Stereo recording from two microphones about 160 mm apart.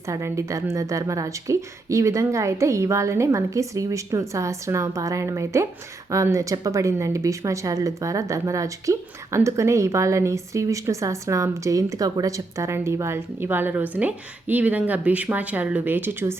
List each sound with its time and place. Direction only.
0.1 s a woman's voice: 20° right (ahead or behind)